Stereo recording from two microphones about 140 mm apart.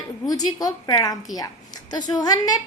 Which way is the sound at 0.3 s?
25° left (ahead or behind).